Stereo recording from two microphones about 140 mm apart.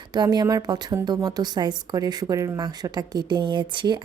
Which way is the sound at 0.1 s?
30° right (ahead or behind).